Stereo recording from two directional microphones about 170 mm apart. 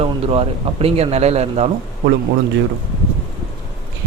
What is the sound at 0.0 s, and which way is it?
Speech, 35° right (ahead or behind).